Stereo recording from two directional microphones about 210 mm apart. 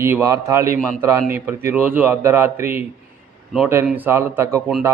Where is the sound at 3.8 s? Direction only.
10° right (ahead or behind).